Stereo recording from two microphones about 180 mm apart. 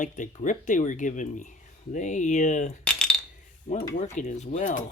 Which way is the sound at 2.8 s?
5° left (ahead or behind).